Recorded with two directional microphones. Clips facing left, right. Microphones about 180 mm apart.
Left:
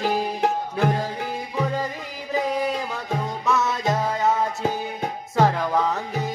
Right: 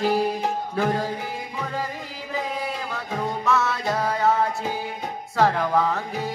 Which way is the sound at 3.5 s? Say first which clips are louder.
Left 2 dB; 20° left (ahead or behind).